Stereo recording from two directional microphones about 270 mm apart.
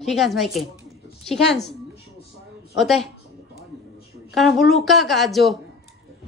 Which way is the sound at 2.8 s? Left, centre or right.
Centre.